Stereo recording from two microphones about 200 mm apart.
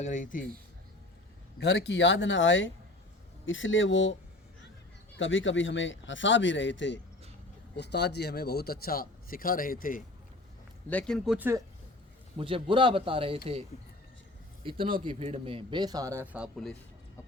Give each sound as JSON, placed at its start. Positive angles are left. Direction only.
{"t": 0.0, "sound": "speech", "side_deg": 40}
{"t": 1.5, "sound": "a man's voice", "side_deg": 60}
{"t": 10.8, "sound": "speech", "side_deg": 5}
{"t": 11.3, "sound": "speech", "side_deg": -10}
{"t": 12.4, "sound": "a man's voice", "side_deg": -25}